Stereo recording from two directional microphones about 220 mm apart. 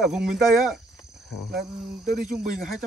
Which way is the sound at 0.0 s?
5° right (ahead or behind).